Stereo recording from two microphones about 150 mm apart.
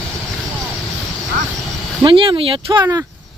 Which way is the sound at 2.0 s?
35° right (ahead or behind).